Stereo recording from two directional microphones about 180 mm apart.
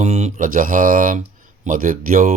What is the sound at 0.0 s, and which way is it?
Speech, 40° right (ahead or behind).